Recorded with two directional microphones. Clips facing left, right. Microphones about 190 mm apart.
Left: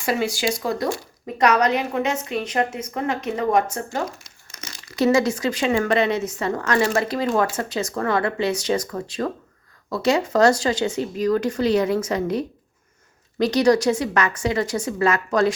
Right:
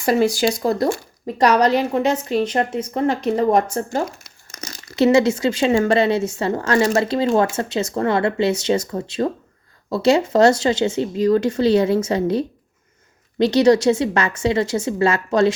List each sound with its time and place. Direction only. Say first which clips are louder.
0.0 s a woman's voice: right 6 dB; 40° right (ahead or behind)
1.4 s a woman's voice: right 3 dB; 30° right (ahead or behind)
4.4 s crumpling: right 5 dB; 45° right (ahead or behind)
4.9 s speech: right 4 dB; 25° right (ahead or behind)